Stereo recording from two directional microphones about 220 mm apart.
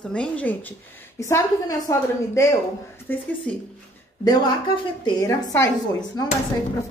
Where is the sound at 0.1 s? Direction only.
5° left (ahead or behind).